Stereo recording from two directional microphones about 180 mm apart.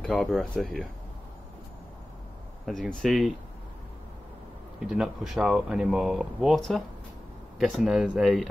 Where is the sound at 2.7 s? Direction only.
Centre (ahead or behind).